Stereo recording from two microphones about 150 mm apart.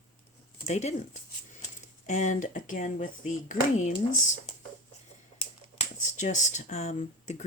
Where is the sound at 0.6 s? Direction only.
50° left (ahead or behind).